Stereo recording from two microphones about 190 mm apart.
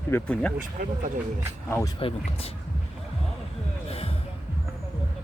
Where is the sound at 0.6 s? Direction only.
45° right (ahead or behind).